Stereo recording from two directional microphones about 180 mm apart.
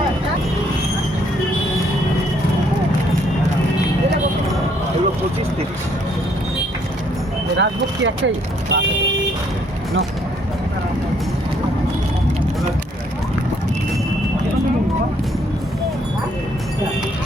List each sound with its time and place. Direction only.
7.5 s speech: 90° right
8.7 s speech: 70° right (ahead or behind)